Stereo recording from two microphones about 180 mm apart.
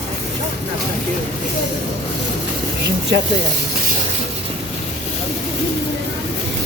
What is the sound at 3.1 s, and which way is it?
Speech, 70° right (ahead or behind).